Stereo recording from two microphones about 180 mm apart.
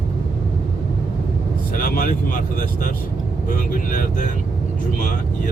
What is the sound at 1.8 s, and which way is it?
Speech, 50° left (ahead or behind).